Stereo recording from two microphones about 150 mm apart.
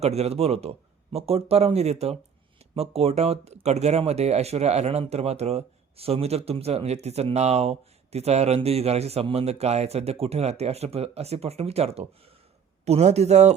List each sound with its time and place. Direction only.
0.0 s speech: 45° right (ahead or behind)